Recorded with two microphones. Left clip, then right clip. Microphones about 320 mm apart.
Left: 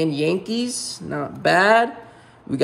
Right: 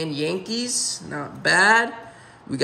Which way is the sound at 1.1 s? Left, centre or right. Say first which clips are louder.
Left 3 dB; centre.